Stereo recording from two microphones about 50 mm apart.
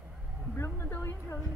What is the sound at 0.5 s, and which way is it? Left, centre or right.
Speech, left.